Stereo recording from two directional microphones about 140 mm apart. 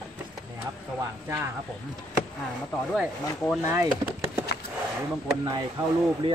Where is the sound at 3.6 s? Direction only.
20° right (ahead or behind).